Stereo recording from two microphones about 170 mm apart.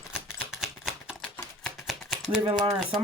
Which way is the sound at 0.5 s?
5° right (ahead or behind).